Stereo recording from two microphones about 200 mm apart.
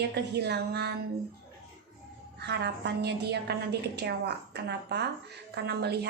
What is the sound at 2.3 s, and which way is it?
Music, 55° right (ahead or behind).